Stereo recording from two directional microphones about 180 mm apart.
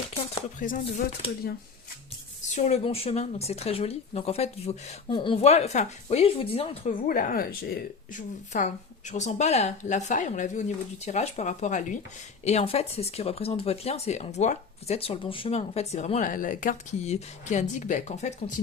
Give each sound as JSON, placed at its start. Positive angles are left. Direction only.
{"t": 0.6, "sound": "speech", "side_deg": 50}
{"t": 2.6, "sound": "speech", "side_deg": 40}
{"t": 7.1, "sound": "speech", "side_deg": 50}